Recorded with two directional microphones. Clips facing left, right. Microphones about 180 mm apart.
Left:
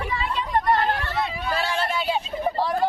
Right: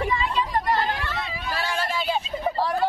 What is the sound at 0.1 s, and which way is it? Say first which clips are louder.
Hubbub: even; 60° left (ahead or behind).